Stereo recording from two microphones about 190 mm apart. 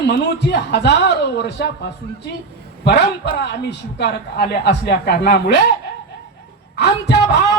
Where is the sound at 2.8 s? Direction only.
60° left (ahead or behind).